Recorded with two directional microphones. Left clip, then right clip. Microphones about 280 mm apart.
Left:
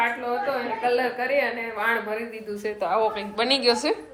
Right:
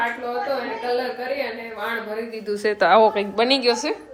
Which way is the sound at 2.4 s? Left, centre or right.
Right.